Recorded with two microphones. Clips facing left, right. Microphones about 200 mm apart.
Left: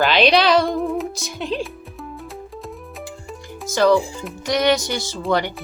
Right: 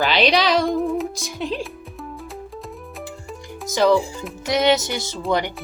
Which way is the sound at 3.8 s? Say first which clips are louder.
Left 1 dB; 20° right (ahead or behind).